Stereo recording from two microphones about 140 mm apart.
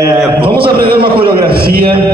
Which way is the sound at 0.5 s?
90° right.